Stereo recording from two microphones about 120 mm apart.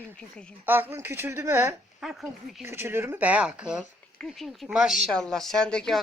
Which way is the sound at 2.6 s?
20° right (ahead or behind).